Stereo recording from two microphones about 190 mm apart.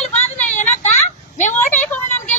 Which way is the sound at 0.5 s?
40° left (ahead or behind).